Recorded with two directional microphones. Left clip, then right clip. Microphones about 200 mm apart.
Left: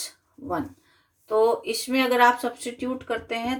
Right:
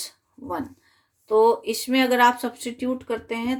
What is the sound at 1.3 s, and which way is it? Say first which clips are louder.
Speech: right 3 dB; 45° right (ahead or behind).